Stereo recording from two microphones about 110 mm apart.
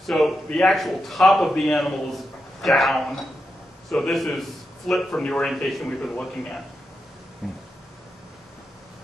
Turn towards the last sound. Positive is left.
turn(degrees=0)  # may be behind; listen again after turning